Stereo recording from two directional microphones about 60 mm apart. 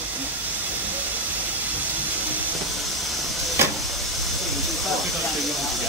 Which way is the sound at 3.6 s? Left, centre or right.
Right.